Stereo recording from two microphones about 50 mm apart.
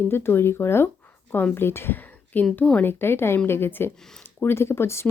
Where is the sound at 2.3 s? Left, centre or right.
Left.